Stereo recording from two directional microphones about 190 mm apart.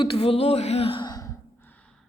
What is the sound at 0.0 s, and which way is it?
Speech, 30° left (ahead or behind).